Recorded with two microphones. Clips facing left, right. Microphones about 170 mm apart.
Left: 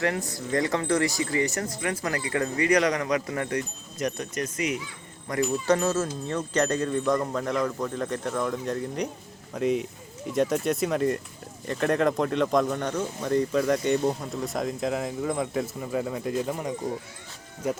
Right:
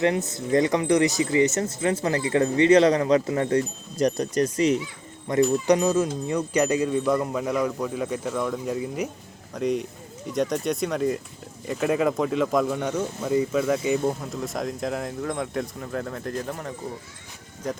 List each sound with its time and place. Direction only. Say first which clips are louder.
0.0 s speech: right 4 dB; 20° right (ahead or behind)
5.3 s speech: right 4 dB; 25° right (ahead or behind); by 16.7 s 10° left (ahead or behind)